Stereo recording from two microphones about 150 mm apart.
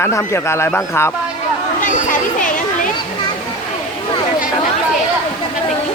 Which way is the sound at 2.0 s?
60° left (ahead or behind).